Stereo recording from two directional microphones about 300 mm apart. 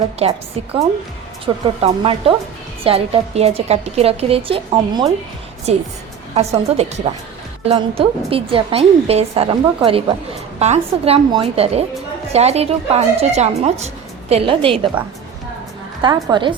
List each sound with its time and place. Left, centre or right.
0.2 s a woman's voice: centre
1.6 s a woman's voice: centre
16.0 s speech: centre